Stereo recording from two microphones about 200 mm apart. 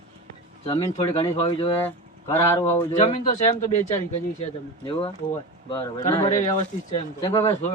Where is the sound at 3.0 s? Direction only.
35° left (ahead or behind).